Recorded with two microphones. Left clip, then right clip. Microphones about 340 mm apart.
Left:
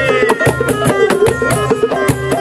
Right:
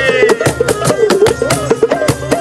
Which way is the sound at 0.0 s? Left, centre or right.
Right.